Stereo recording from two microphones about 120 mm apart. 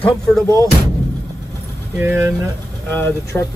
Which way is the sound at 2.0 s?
20° right (ahead or behind).